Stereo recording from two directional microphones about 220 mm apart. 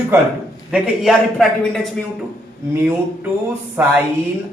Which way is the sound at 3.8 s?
10° right (ahead or behind).